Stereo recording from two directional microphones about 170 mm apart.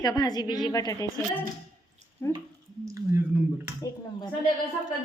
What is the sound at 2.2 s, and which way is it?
Speech, 15° left (ahead or behind).